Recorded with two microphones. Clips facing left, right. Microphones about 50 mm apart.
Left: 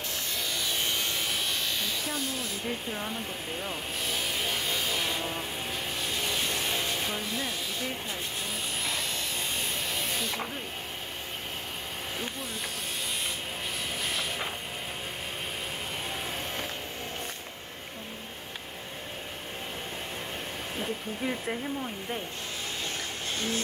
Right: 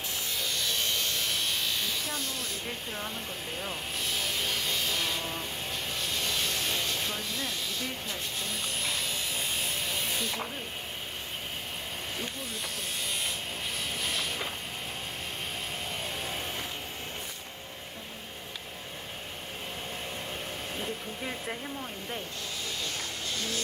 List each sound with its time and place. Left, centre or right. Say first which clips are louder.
0.3 s electric shaver: even; centre
3.6 s vehicle: even; centre
8.4 s electric shaver: even; centre
14.0 s vehicle: left 1 dB; centre
21.2 s speech: left 5 dB; centre
22.8 s a sound: left 1 dB; left